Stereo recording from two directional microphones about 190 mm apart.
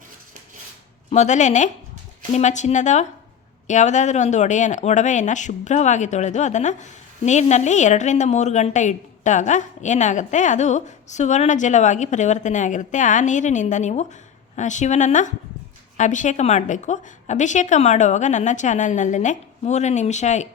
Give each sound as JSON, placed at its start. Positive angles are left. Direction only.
{"t": 1.1, "sound": "a woman's voice", "side_deg": 40}